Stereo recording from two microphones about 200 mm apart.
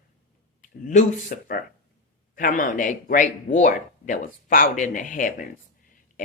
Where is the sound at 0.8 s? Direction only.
40° left (ahead or behind).